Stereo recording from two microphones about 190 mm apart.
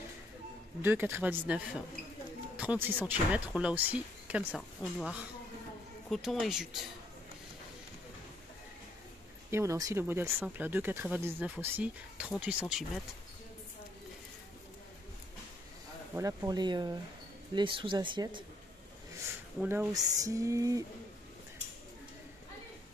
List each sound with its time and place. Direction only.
0.8 s speech: 10° right (ahead or behind)
4.6 s speech: 5° left (ahead or behind)
9.5 s speech: 15° right (ahead or behind)
16.2 s speech: 15° right (ahead or behind)
19.6 s speech: 10° right (ahead or behind)